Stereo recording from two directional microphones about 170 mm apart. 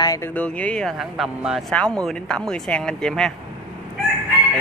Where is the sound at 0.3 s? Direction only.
10° left (ahead or behind).